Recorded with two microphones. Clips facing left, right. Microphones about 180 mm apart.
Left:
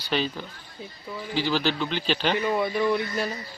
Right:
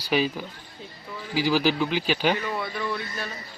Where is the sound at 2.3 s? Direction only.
20° left (ahead or behind).